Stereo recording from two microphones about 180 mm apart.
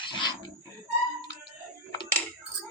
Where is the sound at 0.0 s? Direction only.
25° left (ahead or behind).